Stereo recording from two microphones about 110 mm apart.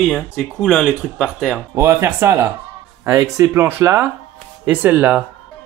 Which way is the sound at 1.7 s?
20° right (ahead or behind).